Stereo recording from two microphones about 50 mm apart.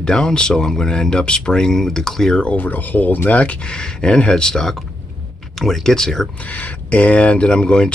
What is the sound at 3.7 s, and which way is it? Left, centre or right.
Speech, centre.